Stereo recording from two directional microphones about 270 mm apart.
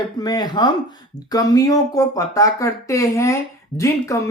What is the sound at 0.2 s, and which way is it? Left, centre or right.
Speech, centre.